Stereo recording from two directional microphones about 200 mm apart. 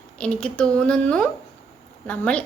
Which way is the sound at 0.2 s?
5° left (ahead or behind).